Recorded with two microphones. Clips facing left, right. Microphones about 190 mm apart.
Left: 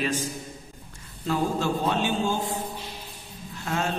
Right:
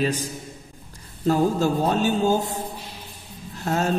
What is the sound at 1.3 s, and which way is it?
A man's voice, 40° right (ahead or behind).